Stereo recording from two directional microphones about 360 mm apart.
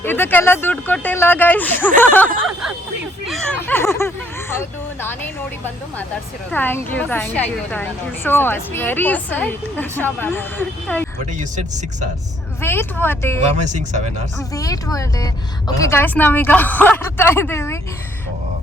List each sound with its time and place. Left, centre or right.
0.0 s a woman's voice: centre
2.0 s a sound: centre
6.5 s a woman's voice: centre
11.3 s speech: centre
12.6 s a woman's voice: centre
14.3 s speech: centre